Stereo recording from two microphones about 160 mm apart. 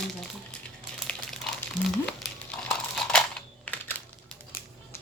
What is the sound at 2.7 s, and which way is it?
Crumpling, 5° left (ahead or behind).